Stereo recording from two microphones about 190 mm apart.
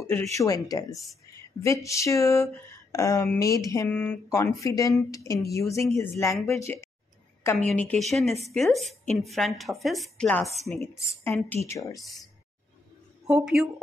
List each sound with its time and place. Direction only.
0.0 s speech: 15° left (ahead or behind)
7.5 s a woman's voice: 5° left (ahead or behind)
13.3 s a woman's voice: 5° right (ahead or behind)